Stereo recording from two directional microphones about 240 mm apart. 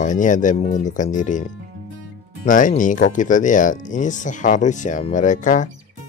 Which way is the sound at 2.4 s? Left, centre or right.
Left.